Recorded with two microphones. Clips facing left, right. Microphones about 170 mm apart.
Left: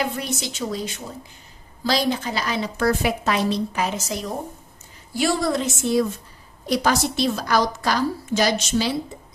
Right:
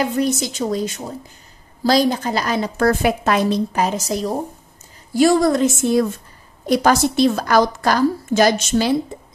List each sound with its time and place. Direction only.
0.0 s a woman's voice: 40° right (ahead or behind)